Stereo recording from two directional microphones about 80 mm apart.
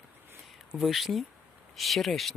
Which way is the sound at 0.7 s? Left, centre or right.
Centre.